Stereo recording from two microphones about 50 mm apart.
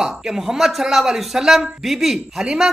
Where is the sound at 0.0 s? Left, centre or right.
Centre.